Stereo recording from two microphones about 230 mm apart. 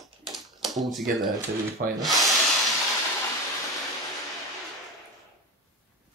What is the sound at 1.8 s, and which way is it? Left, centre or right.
Wood, right.